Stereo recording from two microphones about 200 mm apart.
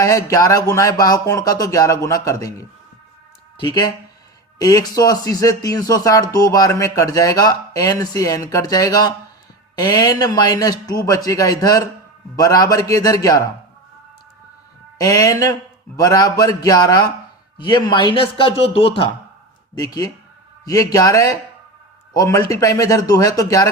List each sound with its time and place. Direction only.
0.0 s speech: 15° left (ahead or behind)
14.9 s speech: 15° left (ahead or behind)
19.8 s speech: 15° left (ahead or behind)